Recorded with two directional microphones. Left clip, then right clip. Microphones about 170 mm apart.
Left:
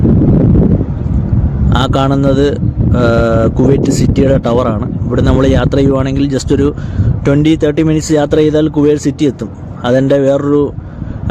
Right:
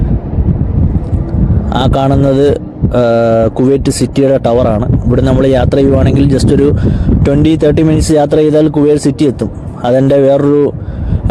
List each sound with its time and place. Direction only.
1.7 s speech: 30° right (ahead or behind)